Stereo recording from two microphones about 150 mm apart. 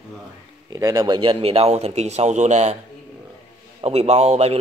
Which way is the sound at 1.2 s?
35° right (ahead or behind).